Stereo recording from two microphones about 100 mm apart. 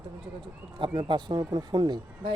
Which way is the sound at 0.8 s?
55° right (ahead or behind).